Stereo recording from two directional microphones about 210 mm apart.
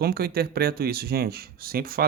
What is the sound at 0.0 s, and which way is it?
Speech, 45° right (ahead or behind).